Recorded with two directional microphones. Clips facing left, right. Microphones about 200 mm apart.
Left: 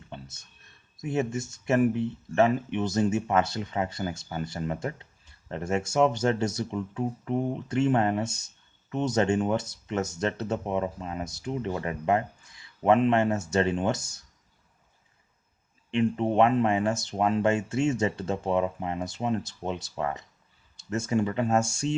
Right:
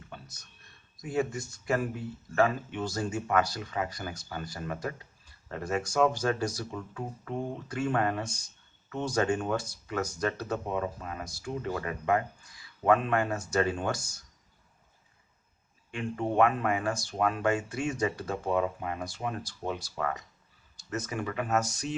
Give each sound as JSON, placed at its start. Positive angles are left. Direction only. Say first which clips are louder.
{"t": 0.1, "sound": "a sound", "louder": "left 6 dB", "side_deg": 25}
{"t": 1.0, "sound": "speech", "louder": "left 2 dB", "side_deg": 25}
{"t": 15.9, "sound": "speech", "louder": "left 7 dB", "side_deg": 20}